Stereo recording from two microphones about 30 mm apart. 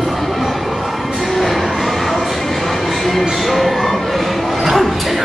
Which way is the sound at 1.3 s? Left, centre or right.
Centre.